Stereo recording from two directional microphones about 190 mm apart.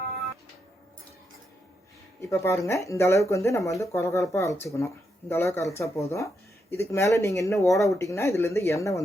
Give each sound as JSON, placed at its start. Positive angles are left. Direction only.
{"t": 2.3, "sound": "speech", "side_deg": 15}